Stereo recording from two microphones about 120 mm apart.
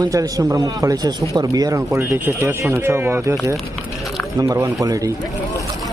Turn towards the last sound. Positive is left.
turn(degrees=-30)  # may be behind; listen again after turning